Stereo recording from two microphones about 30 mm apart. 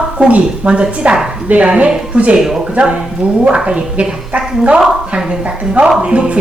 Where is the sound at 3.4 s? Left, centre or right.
Right.